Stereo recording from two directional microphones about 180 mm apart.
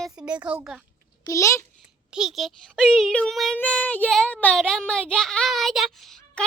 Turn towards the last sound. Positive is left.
turn(degrees=0)  # may be behind; listen again after turning